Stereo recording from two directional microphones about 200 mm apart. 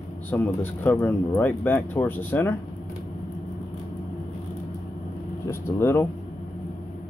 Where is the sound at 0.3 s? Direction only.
10° left (ahead or behind).